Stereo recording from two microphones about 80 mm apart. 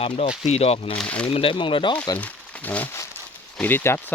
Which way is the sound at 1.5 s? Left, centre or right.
Left.